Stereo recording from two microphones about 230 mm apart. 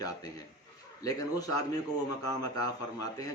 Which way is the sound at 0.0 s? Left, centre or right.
Centre.